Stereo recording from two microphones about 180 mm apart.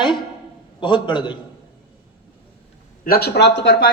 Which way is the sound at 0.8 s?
25° left (ahead or behind).